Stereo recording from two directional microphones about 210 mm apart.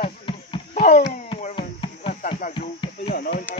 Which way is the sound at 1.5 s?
25° left (ahead or behind).